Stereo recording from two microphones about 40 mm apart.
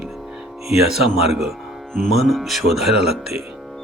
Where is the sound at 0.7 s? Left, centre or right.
Centre.